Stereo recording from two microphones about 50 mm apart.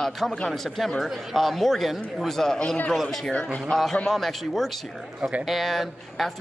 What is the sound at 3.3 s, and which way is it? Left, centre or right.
Speech, left.